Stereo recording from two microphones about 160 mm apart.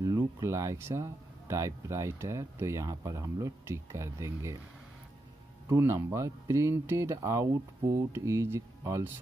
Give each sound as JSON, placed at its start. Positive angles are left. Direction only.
{"t": 0.0, "sound": "speech", "side_deg": -20}
{"t": 5.7, "sound": "speech", "side_deg": -15}